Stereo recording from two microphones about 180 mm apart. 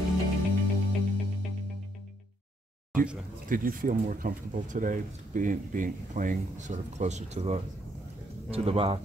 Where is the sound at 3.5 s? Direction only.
50° right (ahead or behind); by 8.9 s 35° right (ahead or behind).